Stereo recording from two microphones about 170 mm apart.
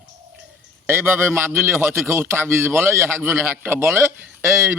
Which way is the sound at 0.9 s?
15° right (ahead or behind).